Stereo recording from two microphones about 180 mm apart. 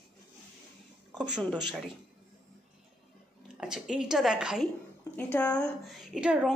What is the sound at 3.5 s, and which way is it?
Speech, 5° right (ahead or behind).